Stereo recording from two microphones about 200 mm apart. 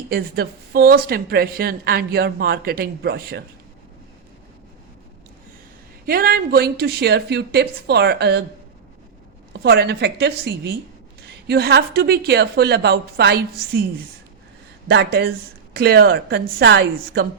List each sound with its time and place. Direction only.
0.1 s speech: 50° right (ahead or behind)
6.1 s speech: 50° right (ahead or behind)
9.5 s a woman's voice: 55° right (ahead or behind)
14.8 s a woman's voice: 55° right (ahead or behind)